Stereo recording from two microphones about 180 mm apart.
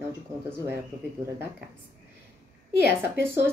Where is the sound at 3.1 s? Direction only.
15° right (ahead or behind).